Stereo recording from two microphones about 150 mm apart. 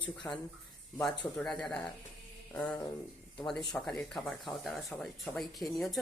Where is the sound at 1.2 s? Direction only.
5° left (ahead or behind).